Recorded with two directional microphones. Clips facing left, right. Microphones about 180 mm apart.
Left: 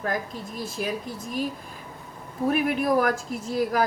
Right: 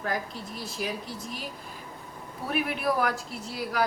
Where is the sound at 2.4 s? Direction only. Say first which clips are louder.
Left 5 dB; 45° left (ahead or behind).